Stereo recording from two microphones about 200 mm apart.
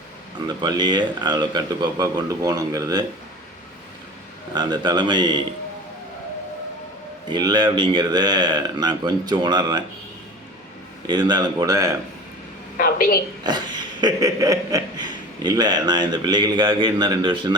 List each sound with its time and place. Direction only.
0.4 s speech: 20° right (ahead or behind)
4.5 s speech: 20° right (ahead or behind)
7.3 s speech: 20° right (ahead or behind)
11.0 s speech: 20° right (ahead or behind)
12.7 s a woman's voice: 45° left (ahead or behind)
13.4 s speech: 20° right (ahead or behind)